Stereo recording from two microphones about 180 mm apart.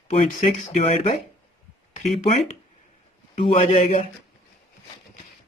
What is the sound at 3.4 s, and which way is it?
Speech, 35° left (ahead or behind).